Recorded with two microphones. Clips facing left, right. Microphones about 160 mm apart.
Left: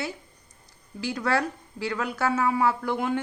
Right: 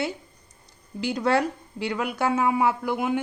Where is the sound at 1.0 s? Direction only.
20° right (ahead or behind).